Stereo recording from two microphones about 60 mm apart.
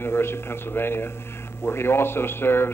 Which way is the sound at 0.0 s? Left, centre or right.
Left.